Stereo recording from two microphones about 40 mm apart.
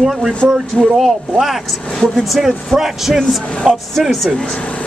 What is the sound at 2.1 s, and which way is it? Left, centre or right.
Speech, centre.